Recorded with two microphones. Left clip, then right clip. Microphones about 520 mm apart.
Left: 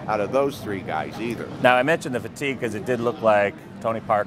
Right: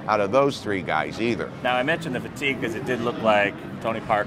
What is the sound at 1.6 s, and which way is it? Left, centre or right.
Speech, left.